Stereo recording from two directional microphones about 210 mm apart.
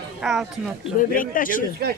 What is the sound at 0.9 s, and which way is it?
Speech, 40° left (ahead or behind).